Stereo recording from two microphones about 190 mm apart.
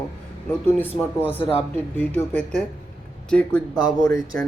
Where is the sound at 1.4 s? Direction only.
25° left (ahead or behind).